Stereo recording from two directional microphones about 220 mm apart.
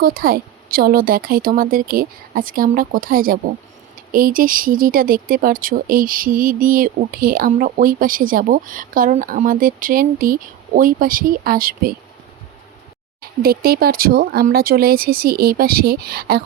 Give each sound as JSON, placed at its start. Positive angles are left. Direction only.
{"t": 0.0, "sound": "speech", "side_deg": -40}
{"t": 13.4, "sound": "speech", "side_deg": -45}